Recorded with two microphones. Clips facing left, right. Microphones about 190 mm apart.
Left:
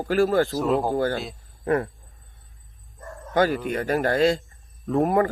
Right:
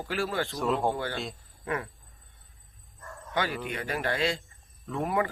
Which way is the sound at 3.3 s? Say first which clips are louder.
Left 9 dB; 45° left (ahead or behind).